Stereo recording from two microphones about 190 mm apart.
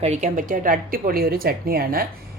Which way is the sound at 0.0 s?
35° right (ahead or behind).